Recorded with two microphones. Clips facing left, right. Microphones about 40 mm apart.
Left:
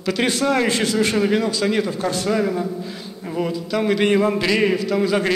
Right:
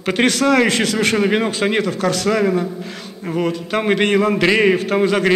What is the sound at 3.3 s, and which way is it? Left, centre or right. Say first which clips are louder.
Speech: right 3 dB; right.